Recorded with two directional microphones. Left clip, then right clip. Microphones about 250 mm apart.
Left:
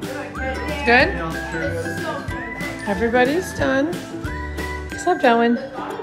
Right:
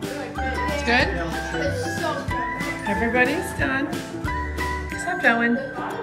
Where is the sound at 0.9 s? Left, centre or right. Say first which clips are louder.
Left 6 dB; centre.